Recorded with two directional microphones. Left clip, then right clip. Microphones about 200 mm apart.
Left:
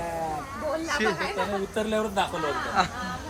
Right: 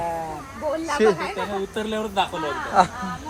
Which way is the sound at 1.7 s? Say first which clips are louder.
Right 2 dB; 20° right (ahead or behind).